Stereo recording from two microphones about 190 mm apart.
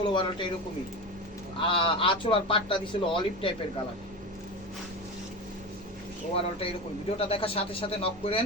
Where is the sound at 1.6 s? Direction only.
25° left (ahead or behind).